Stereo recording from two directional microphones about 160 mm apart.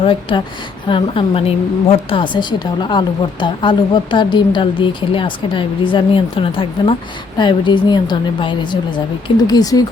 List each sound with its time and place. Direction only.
0.0 s a woman's voice: 30° left (ahead or behind)